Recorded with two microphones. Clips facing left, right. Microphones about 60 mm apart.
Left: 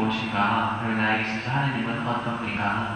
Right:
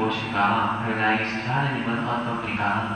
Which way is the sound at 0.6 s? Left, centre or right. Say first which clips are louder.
Right 1 dB; right.